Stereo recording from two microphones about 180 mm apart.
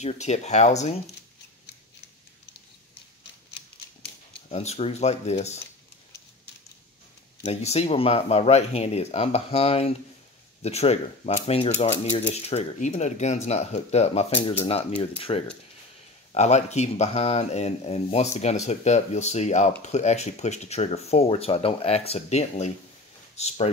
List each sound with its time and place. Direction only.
0.0 s speech: 40° left (ahead or behind)
4.5 s speech: 35° left (ahead or behind)
7.4 s speech: 35° left (ahead or behind)